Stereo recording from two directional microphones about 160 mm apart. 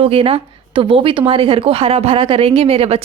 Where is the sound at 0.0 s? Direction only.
35° right (ahead or behind).